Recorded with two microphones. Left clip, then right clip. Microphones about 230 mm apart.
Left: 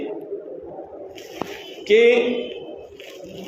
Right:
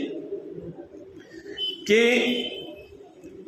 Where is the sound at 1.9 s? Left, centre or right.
Right.